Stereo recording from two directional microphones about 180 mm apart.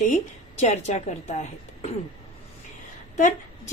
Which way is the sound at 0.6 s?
40° left (ahead or behind).